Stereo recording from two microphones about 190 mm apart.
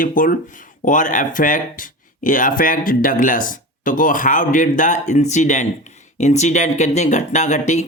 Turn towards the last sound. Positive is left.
turn(degrees=40)  # may be behind; listen again after turning